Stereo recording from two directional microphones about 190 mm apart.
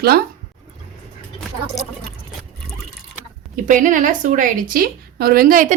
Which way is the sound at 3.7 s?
45° right (ahead or behind).